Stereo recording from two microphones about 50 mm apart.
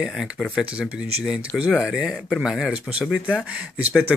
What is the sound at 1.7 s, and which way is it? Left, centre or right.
Speech, centre.